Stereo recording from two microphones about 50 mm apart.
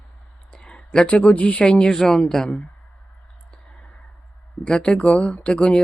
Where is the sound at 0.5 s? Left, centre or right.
Centre.